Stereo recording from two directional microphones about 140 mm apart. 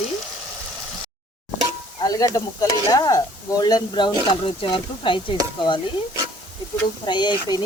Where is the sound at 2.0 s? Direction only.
25° left (ahead or behind).